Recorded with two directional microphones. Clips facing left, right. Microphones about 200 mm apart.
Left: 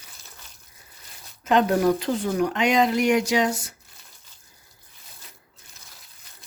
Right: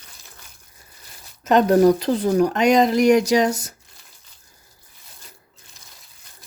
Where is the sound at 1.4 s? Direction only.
40° right (ahead or behind).